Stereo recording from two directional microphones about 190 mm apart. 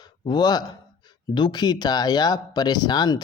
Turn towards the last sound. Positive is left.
turn(degrees=20)  # may be behind; listen again after turning